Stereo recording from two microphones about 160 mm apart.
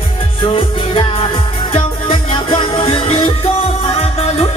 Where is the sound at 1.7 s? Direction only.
35° left (ahead or behind).